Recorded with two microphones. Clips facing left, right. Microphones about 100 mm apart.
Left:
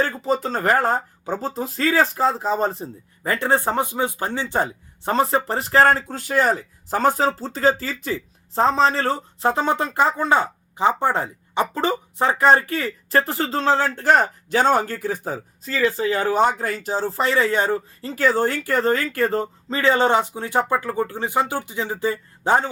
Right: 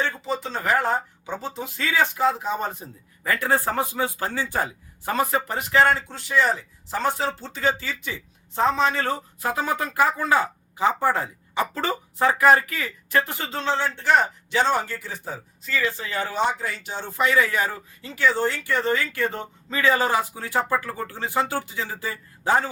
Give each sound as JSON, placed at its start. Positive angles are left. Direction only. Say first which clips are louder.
{"t": 0.3, "sound": "speech", "louder": "left 5 dB", "side_deg": 45}
{"t": 18.1, "sound": "speech", "louder": "left 3 dB", "side_deg": 45}